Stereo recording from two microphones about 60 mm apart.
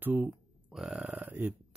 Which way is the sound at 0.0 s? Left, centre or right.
Right.